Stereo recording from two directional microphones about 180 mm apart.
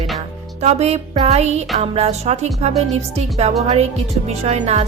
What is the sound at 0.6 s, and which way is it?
A woman's voice, 35° right (ahead or behind).